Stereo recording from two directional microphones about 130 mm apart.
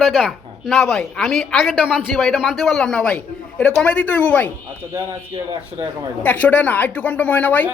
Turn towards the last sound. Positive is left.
turn(degrees=10)  # may be behind; listen again after turning